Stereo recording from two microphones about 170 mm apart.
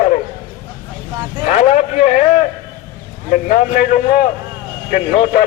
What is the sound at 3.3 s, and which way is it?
A man's voice, 50° left (ahead or behind).